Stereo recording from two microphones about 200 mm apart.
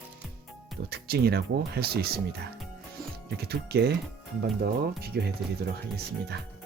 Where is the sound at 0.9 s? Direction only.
50° right (ahead or behind).